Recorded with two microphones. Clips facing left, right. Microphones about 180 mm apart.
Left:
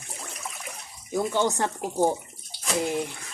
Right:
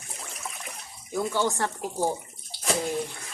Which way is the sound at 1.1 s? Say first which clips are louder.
Left 2 dB; 20° left (ahead or behind).